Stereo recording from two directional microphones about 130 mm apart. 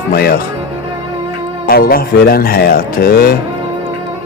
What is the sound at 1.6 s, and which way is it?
Music, 90° left.